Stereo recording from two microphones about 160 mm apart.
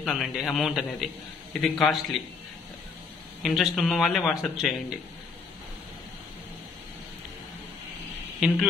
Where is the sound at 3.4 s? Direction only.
Centre (ahead or behind).